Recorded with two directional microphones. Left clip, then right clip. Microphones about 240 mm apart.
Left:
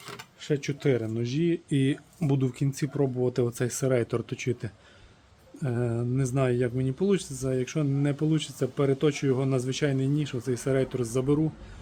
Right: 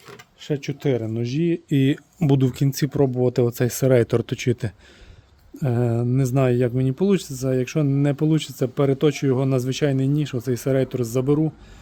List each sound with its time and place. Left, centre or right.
0.4 s speech: right